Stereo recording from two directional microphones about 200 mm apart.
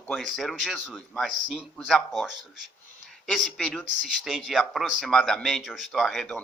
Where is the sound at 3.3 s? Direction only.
Centre (ahead or behind).